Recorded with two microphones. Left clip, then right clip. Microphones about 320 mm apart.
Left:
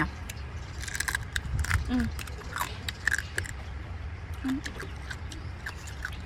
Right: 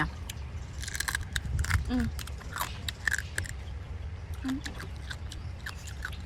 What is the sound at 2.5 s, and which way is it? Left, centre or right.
Biting, right.